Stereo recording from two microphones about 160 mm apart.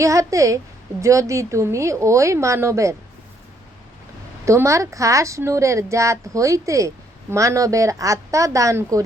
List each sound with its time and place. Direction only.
0.0 s speech: 20° right (ahead or behind)
4.4 s speech: 20° right (ahead or behind)